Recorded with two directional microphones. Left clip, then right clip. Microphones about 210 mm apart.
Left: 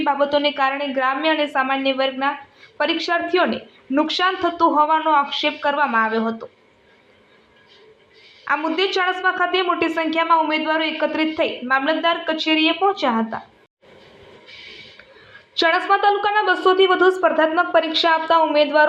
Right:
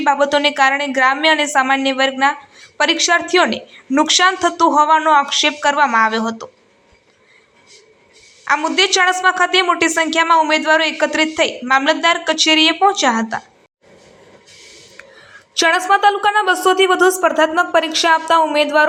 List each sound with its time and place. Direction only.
0.0 s speech: 20° right (ahead or behind)
8.4 s speech: 20° right (ahead or behind)
15.5 s a woman's voice: 15° right (ahead or behind)